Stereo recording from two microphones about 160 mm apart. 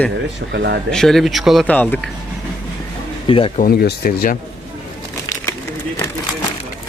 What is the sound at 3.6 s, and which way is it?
Speech, 75° left (ahead or behind).